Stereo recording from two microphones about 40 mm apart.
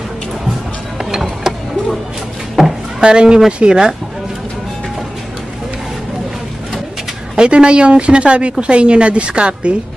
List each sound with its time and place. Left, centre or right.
1.2 s vehicle: centre
2.6 s a sound: centre
3.0 s speech: right
7.3 s a woman's voice: right